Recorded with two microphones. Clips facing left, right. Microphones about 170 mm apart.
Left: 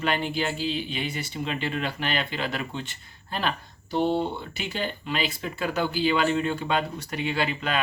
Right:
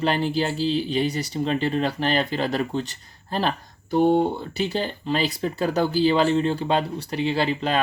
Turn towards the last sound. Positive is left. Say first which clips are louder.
# right 4 dB
turn(degrees=-35)  # may be behind; listen again after turning